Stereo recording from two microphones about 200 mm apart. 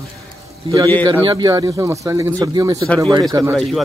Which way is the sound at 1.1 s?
20° right (ahead or behind).